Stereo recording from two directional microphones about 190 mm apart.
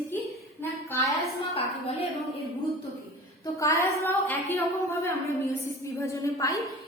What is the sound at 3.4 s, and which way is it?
A woman's voice, 15° left (ahead or behind).